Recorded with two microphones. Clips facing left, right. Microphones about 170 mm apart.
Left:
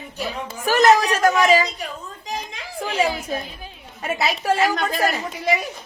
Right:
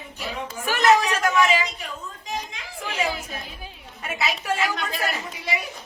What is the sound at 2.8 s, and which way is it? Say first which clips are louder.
A woman's voice: left 5 dB; 35° left (ahead or behind).